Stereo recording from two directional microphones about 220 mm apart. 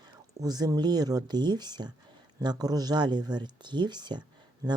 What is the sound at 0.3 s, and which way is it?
Speech, 15° right (ahead or behind).